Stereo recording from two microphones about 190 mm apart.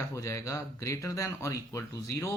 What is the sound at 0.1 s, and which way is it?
Speech, 15° left (ahead or behind).